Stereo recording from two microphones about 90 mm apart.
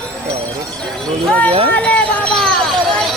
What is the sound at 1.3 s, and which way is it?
Speech, 15° left (ahead or behind).